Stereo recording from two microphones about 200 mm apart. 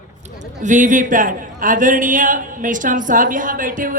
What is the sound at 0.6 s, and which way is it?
A man's voice, 40° right (ahead or behind).